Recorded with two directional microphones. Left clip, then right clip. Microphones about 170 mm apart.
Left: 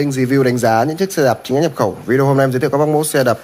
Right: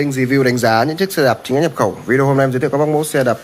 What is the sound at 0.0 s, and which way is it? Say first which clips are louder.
Speech: even; 15° left (ahead or behind).